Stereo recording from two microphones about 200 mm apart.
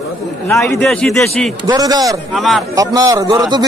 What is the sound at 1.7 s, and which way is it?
Speech, 20° right (ahead or behind).